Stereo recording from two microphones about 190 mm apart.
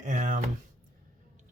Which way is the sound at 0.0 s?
40° right (ahead or behind).